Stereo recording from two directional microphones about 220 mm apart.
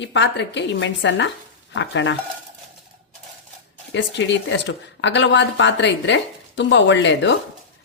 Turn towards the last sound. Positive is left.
turn(degrees=55)  # may be behind; listen again after turning